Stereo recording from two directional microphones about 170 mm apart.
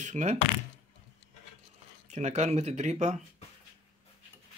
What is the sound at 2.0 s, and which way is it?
Speech, 40° right (ahead or behind).